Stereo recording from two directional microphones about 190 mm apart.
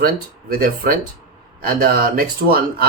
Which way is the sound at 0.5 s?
50° right (ahead or behind).